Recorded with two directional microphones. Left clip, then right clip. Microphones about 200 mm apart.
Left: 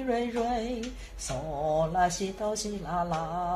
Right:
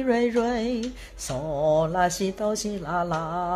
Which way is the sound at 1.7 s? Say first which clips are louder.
Right 3 dB; 55° right (ahead or behind).